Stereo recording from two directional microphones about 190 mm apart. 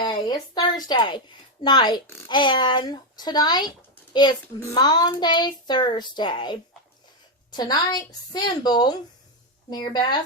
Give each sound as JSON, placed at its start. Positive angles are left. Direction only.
{"t": 0.0, "sound": "a child's voice", "side_deg": 25}